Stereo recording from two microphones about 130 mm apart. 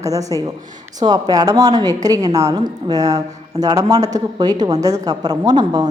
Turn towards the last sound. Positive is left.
turn(degrees=-30)  # may be behind; listen again after turning